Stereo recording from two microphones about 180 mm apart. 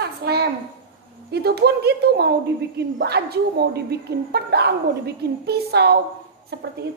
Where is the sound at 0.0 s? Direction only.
60° right (ahead or behind).